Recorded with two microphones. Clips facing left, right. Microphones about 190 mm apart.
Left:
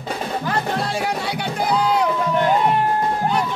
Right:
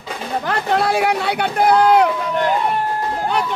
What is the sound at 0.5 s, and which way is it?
Speech, 70° right (ahead or behind).